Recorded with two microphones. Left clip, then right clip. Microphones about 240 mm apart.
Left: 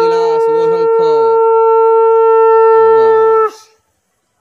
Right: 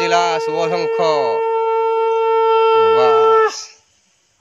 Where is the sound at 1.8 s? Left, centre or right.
Left.